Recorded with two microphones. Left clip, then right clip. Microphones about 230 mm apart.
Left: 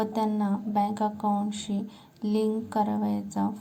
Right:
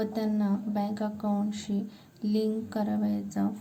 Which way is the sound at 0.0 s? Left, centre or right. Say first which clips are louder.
Left 3 dB; centre.